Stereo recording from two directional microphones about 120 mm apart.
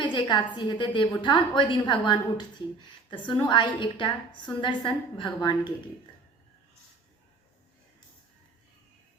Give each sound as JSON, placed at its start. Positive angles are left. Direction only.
{"t": 0.0, "sound": "a woman's voice", "side_deg": 40}